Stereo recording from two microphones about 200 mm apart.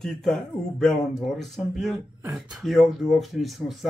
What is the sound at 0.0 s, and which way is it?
A man's voice, centre (ahead or behind).